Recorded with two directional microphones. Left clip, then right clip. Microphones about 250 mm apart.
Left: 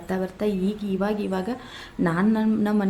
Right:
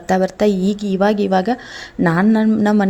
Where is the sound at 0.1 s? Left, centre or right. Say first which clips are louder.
Right 11 dB; right.